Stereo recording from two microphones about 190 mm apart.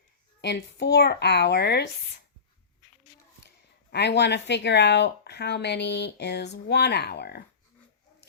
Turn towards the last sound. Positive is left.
turn(degrees=60)  # may be behind; listen again after turning